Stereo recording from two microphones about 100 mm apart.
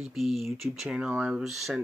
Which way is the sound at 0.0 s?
Centre (ahead or behind).